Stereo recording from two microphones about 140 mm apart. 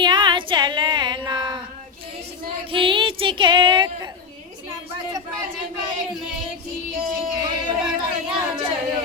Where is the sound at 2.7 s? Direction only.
35° right (ahead or behind).